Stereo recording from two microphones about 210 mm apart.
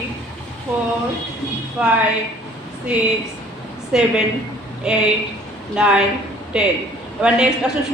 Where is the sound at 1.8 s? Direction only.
5° right (ahead or behind).